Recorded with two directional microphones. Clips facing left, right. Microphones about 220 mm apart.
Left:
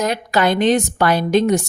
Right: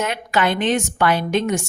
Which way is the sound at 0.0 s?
35° left (ahead or behind).